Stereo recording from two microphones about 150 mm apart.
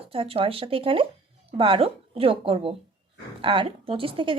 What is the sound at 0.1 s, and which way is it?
A woman's voice, 40° right (ahead or behind).